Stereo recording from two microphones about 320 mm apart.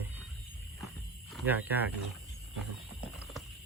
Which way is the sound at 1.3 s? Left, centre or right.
Centre.